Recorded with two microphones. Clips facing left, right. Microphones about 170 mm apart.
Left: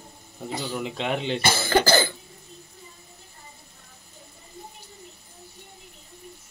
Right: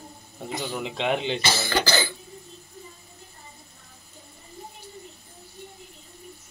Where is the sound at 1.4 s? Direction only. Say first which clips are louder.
Left 4 dB; 50° left (ahead or behind).